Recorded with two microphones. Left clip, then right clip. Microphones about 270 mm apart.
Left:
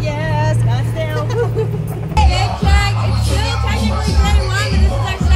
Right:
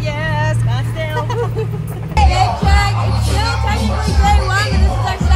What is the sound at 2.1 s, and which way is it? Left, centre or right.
Music, centre.